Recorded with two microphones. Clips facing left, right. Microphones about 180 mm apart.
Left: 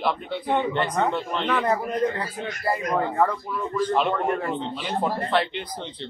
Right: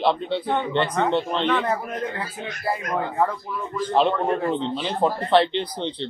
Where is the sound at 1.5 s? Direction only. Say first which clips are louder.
Even; centre (ahead or behind).